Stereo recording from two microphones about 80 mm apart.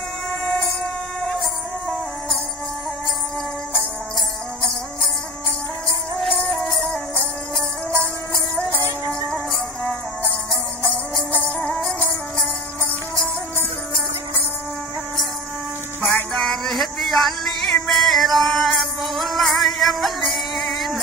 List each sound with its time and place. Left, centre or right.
1.2 s a sound: centre
6.2 s music: centre
11.4 s music: centre
16.3 s music: centre